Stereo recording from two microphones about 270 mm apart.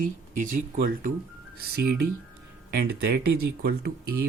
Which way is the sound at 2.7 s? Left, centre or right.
Right.